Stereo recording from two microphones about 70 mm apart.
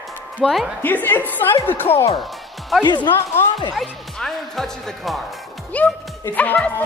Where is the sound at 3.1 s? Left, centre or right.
Left.